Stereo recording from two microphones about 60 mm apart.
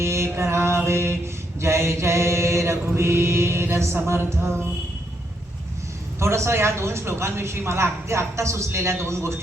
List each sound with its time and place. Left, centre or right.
0.0 s mantra: right
6.1 s speech: right